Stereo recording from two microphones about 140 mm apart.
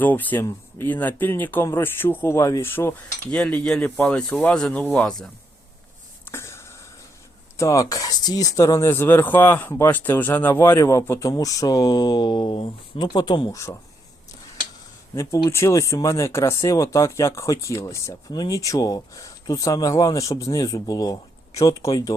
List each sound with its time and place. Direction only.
0.0 s speech: 10° left (ahead or behind)
3.2 s speech: 5° left (ahead or behind)
6.2 s a sound: 20° left (ahead or behind)
7.5 s speech: 20° left (ahead or behind)
13.5 s speech: 20° left (ahead or behind)
15.1 s speech: 20° left (ahead or behind)